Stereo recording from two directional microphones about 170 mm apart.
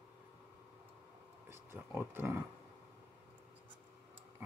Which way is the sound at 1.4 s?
15° right (ahead or behind).